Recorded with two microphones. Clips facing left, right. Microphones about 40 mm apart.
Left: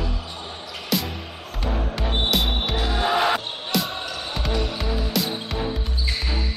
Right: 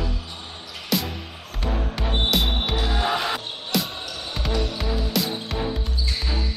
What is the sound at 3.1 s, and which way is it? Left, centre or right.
Music, left.